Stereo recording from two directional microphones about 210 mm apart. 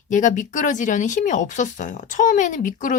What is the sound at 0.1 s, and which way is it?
Speech, 35° left (ahead or behind).